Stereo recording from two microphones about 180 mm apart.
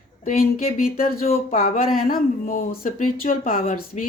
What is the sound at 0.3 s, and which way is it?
Speech, 50° left (ahead or behind).